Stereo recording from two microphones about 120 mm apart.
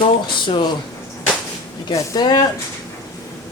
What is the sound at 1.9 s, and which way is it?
Speech, 35° left (ahead or behind).